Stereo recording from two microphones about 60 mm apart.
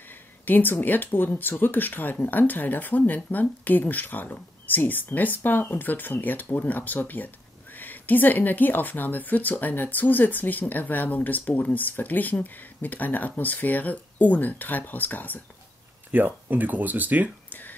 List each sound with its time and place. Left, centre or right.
0.5 s speech: left
16.1 s speech: right
17.5 s a sound: left